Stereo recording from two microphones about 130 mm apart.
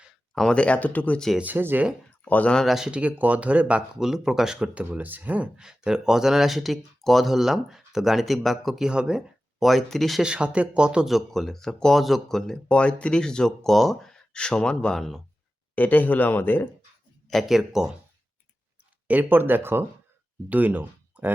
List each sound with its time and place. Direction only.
0.1 s speech: 5° left (ahead or behind)
1.4 s speech: 15° right (ahead or behind)
2.2 s speech: 10° left (ahead or behind)
15.7 s speech: 15° left (ahead or behind)
17.2 s speech: centre (ahead or behind)
19.0 s speech: 15° right (ahead or behind)